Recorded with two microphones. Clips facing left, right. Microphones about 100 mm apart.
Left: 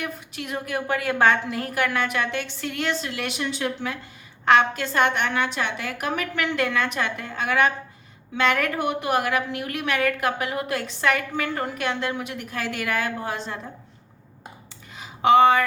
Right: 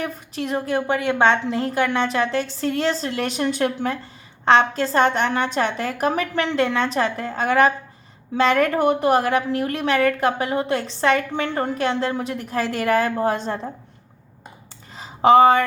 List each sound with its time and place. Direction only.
0.0 s a woman's voice: 35° right (ahead or behind)
4.4 s a woman's voice: 30° right (ahead or behind)
14.9 s a sound: 35° right (ahead or behind)